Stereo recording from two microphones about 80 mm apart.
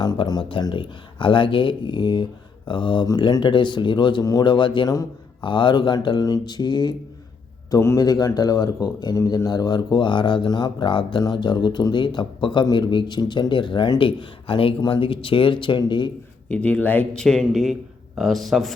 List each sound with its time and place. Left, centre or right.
0.0 s speech: left
4.2 s a man's voice: left
4.4 s speech: left
6.2 s speech: left
7.8 s a man's voice: left
8.0 s speech: left
11.2 s speech: left
16.5 s speech: centre
17.2 s speech: centre